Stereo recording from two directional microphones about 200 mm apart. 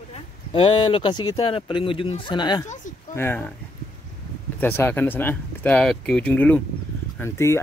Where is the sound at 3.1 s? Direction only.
10° left (ahead or behind).